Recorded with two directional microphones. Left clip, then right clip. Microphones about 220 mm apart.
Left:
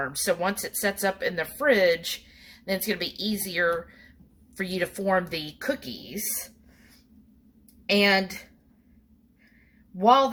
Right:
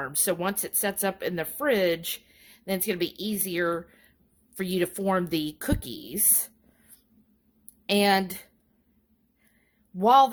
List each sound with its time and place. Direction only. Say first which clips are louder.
0.0 s speech: left 2 dB; 50° right (ahead or behind)
7.9 s speech: left 1 dB; 55° right (ahead or behind)
10.0 s a man's voice: right 1 dB; 55° right (ahead or behind)